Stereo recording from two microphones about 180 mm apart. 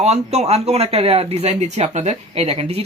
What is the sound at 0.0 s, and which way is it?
Speech, 35° right (ahead or behind).